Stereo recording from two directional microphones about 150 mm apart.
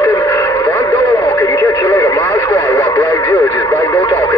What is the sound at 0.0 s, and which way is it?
Radio, 20° left (ahead or behind).